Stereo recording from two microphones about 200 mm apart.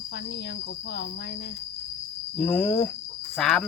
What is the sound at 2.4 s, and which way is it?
Speech, 10° left (ahead or behind).